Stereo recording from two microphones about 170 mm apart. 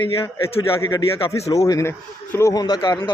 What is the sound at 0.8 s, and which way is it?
A man's voice, 20° left (ahead or behind).